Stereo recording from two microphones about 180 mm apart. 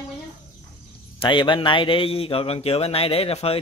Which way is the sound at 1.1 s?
25° left (ahead or behind).